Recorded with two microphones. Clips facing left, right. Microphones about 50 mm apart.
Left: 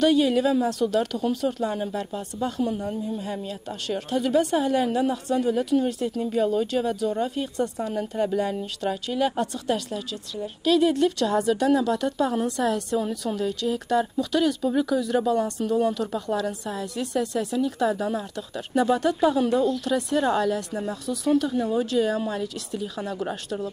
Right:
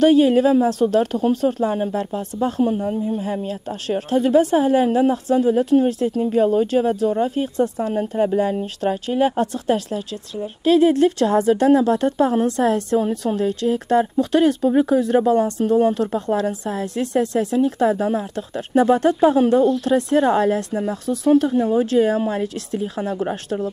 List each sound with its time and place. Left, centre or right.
0.0 s a woman's voice: right
3.9 s speech: right
8.4 s a woman's voice: right
17.6 s speech: right